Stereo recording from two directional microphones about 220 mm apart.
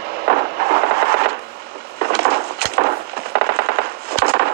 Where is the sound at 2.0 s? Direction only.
45° right (ahead or behind).